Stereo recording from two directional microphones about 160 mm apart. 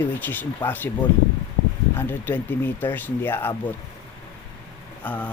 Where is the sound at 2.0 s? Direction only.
10° left (ahead or behind).